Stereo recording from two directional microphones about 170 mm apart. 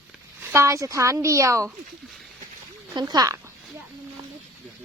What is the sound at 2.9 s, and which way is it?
Speech, 25° right (ahead or behind).